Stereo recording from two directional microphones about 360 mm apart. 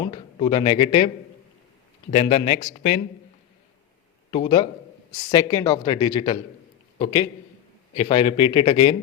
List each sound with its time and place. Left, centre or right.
0.0 s speech: centre
4.3 s speech: centre